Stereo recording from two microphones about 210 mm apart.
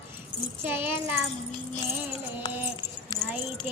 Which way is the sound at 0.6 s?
10° right (ahead or behind).